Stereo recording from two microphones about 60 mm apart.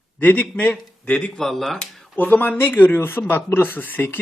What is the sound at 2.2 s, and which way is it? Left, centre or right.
Speech, left.